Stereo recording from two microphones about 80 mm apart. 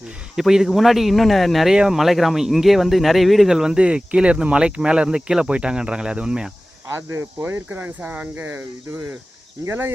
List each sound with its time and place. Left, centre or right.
0.3 s speech: centre
6.8 s speech: right
7.3 s speech: right